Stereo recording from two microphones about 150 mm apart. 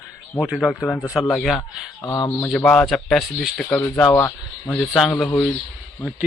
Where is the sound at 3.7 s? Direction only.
15° left (ahead or behind).